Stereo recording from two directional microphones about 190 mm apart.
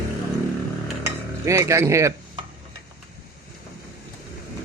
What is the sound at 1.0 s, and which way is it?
Stir, 15° right (ahead or behind).